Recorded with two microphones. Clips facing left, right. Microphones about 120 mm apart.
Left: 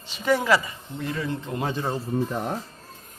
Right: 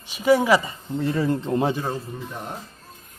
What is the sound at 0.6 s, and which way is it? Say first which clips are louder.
Speech: right 7 dB; 30° right (ahead or behind).